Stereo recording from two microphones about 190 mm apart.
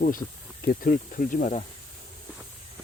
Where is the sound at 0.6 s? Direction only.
45° left (ahead or behind).